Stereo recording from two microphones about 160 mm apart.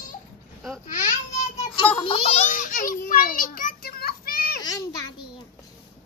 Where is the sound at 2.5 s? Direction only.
55° left (ahead or behind).